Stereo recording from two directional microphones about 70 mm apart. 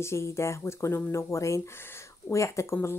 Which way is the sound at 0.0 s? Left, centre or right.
Left.